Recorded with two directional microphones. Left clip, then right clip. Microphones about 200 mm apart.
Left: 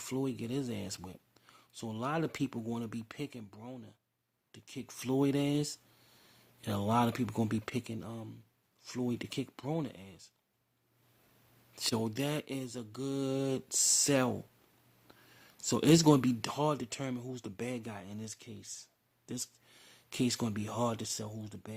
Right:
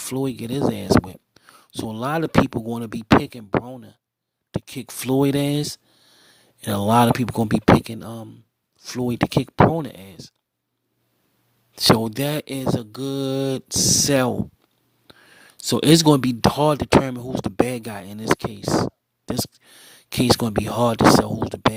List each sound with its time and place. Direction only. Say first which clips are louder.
0.0 s speech: right 11 dB; 35° right (ahead or behind)
11.7 s speech: right 17 dB; 35° right (ahead or behind)